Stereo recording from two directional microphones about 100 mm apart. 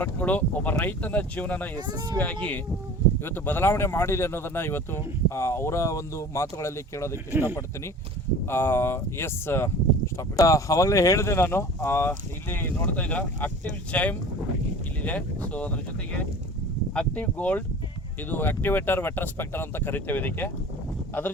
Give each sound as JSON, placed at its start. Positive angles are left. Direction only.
{"t": 0.0, "sound": "speech", "side_deg": 15}
{"t": 1.9, "sound": "speech", "side_deg": -40}
{"t": 2.1, "sound": "speech", "side_deg": 15}
{"t": 8.4, "sound": "speech", "side_deg": 25}
{"t": 16.9, "sound": "speech", "side_deg": 10}